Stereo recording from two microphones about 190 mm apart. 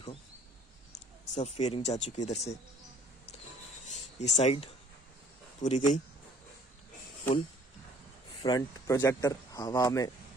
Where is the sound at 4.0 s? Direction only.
35° left (ahead or behind).